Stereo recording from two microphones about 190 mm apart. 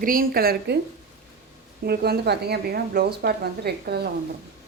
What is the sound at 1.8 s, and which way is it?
A woman's voice, 55° right (ahead or behind).